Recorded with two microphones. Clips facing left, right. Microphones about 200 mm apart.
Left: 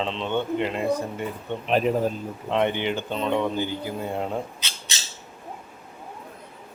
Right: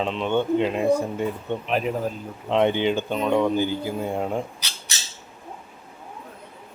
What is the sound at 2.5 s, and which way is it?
Speech, 15° right (ahead or behind).